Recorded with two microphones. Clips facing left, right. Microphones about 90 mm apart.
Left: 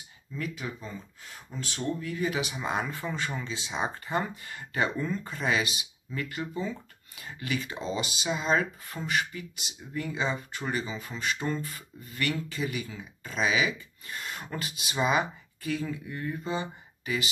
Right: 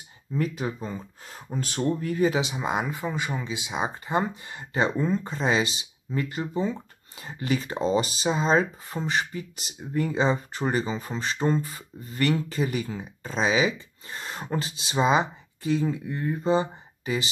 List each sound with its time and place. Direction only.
0.3 s speech: 35° right (ahead or behind)
2.2 s speech: 25° right (ahead or behind)